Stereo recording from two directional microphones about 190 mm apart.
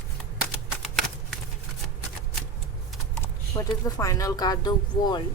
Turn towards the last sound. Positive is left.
turn(degrees=20)  # may be behind; listen again after turning